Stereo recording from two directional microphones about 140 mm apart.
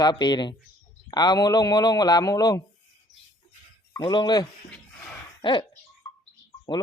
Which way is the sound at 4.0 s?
35° left (ahead or behind).